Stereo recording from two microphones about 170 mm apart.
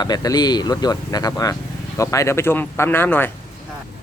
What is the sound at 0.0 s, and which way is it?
Speech, 25° left (ahead or behind).